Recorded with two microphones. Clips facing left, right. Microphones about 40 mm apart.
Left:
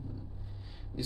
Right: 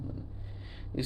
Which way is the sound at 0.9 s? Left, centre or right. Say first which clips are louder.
Right 4 dB; right.